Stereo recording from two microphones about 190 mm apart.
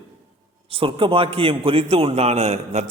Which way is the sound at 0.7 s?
30° right (ahead or behind).